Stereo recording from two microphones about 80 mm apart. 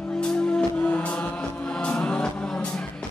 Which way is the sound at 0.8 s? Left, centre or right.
Centre.